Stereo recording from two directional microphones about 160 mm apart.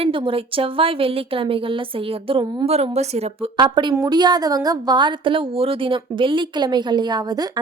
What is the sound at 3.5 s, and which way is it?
A woman's voice, 25° right (ahead or behind).